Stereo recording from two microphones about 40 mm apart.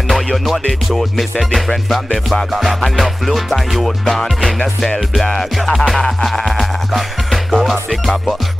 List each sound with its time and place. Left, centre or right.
0.1 s music: centre
5.2 s music: centre